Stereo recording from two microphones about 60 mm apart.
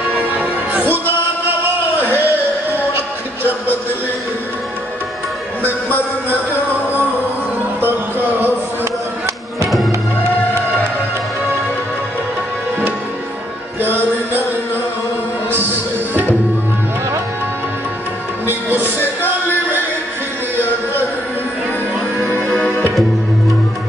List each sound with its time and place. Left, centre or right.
0.1 s music: right
2.0 s a sound: left
5.7 s music: left
7.8 s music: right
13.7 s music: right
18.5 s music: right